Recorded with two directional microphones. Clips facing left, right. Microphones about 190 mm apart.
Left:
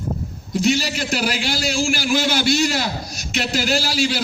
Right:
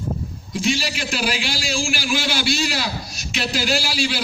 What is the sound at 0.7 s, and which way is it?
A man's voice, 45° left (ahead or behind).